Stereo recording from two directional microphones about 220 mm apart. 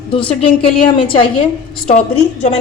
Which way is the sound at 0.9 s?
25° left (ahead or behind).